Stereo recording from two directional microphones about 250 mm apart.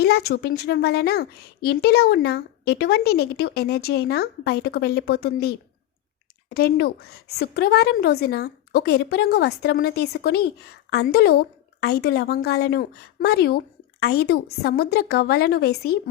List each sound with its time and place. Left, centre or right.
0.0 s a woman's voice: left